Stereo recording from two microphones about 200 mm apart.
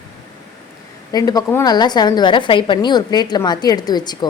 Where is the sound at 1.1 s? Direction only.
20° left (ahead or behind).